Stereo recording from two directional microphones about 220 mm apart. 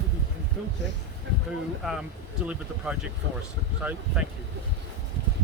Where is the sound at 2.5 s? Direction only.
5° right (ahead or behind).